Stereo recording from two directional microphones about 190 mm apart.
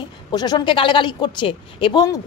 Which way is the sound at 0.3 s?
20° left (ahead or behind).